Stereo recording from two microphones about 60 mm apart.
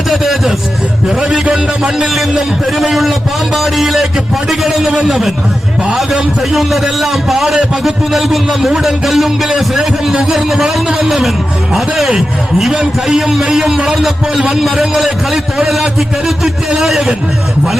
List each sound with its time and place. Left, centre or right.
0.1 s a sound: centre
1.0 s a man's voice: centre
2.7 s a man's voice: centre